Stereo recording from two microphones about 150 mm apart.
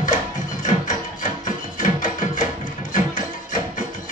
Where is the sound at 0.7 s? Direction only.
55° left (ahead or behind).